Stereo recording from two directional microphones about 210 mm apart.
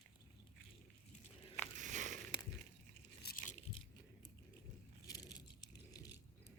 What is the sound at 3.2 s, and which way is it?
Crunch, 45° left (ahead or behind).